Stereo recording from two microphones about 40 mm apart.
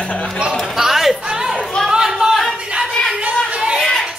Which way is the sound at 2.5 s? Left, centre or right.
Right.